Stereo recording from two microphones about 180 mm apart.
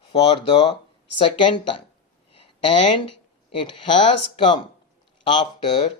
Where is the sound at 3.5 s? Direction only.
25° left (ahead or behind).